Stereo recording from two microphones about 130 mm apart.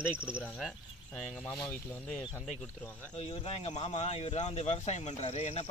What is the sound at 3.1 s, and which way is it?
Speech, 50° left (ahead or behind).